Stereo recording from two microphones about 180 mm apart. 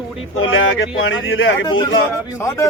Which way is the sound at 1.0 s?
90° left.